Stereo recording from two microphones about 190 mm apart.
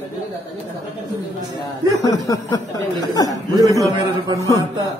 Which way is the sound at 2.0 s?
20° left (ahead or behind).